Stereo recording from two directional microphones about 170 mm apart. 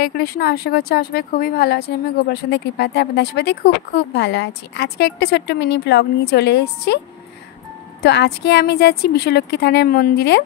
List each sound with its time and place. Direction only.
0.0 s speech: 65° left (ahead or behind)
2.2 s speech: 75° left (ahead or behind)
8.0 s a woman's voice: 75° left (ahead or behind)